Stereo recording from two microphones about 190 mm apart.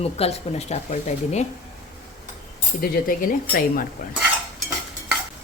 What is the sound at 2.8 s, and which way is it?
Speech, 50° left (ahead or behind).